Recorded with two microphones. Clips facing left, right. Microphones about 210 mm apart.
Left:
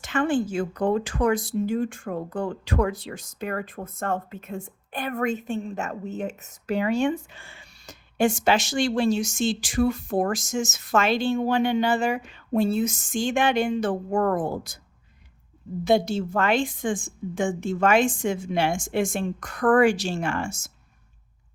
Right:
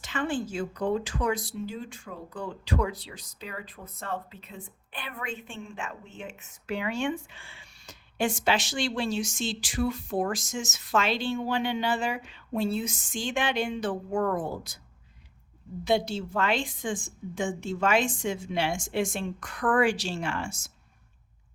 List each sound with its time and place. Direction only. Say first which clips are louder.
0.0 s speech: left 7 dB; 50° left (ahead or behind)
15.8 s speech: left 5 dB; 45° left (ahead or behind)